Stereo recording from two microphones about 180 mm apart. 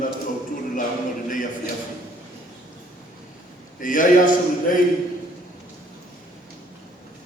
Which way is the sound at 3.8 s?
50° left (ahead or behind).